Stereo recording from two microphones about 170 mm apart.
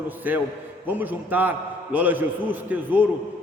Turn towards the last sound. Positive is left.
turn(degrees=-10)  # may be behind; listen again after turning